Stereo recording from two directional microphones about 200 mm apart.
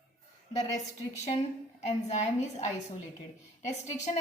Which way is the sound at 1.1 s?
35° left (ahead or behind).